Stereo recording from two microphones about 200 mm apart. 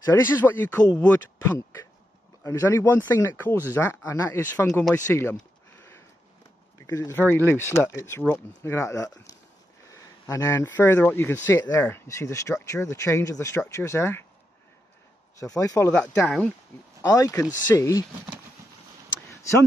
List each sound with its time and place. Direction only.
0.1 s speech: 10° left (ahead or behind)
6.9 s speech: 15° left (ahead or behind)
15.3 s speech: 15° left (ahead or behind)